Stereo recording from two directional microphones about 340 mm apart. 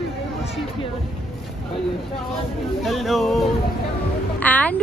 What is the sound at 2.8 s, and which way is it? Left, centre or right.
A woman's voice, centre.